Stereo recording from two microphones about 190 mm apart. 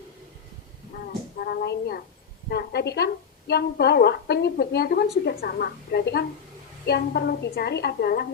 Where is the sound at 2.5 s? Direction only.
60° left (ahead or behind).